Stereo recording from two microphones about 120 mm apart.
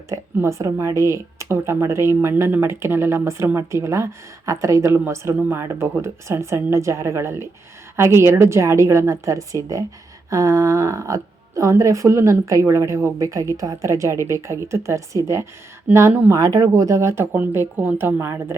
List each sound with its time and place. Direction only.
0.1 s speech: 25° right (ahead or behind)
16.4 s speech: 30° right (ahead or behind)